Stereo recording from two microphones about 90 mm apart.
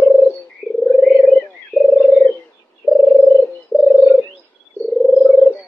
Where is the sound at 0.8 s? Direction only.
5° left (ahead or behind).